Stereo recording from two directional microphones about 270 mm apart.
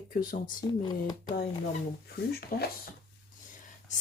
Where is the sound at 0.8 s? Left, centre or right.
Centre.